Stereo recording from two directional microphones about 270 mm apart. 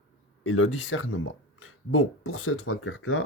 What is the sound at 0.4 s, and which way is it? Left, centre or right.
Speech, left.